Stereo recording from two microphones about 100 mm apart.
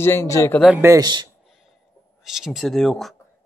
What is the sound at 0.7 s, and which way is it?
Speech, 25° right (ahead or behind).